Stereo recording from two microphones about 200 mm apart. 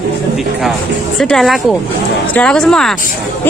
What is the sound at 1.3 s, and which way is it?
Speech, centre (ahead or behind).